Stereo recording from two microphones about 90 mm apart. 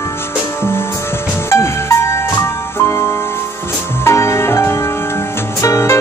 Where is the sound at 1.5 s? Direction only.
30° left (ahead or behind).